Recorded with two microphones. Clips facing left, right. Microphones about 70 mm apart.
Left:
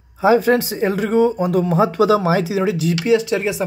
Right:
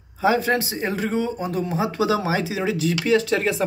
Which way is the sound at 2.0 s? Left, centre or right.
Left.